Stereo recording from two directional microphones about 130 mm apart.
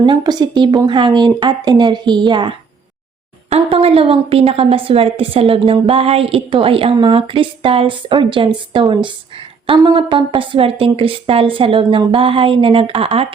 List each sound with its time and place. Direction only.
0.0 s a woman's voice: 30° right (ahead or behind)
9.7 s a woman's voice: 30° right (ahead or behind)